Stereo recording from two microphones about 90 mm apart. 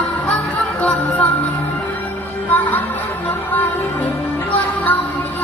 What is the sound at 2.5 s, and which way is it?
Music, 20° left (ahead or behind).